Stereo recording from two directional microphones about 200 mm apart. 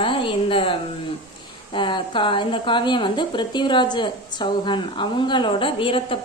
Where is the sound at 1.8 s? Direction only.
25° left (ahead or behind).